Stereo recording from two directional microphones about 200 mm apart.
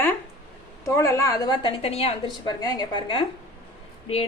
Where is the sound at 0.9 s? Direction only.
15° left (ahead or behind).